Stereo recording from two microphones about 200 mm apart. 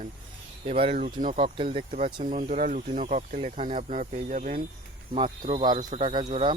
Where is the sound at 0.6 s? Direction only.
30° right (ahead or behind).